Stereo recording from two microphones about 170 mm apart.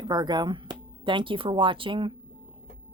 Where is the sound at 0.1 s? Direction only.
25° right (ahead or behind).